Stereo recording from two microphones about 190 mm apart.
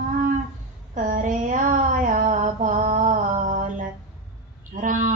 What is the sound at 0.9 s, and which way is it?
Female singing, 45° right (ahead or behind).